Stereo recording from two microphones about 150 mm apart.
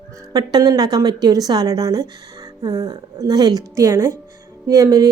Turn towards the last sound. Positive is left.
turn(degrees=-25)  # may be behind; listen again after turning